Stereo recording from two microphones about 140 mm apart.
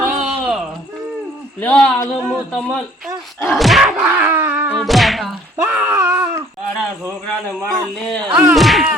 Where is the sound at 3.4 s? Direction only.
Centre (ahead or behind).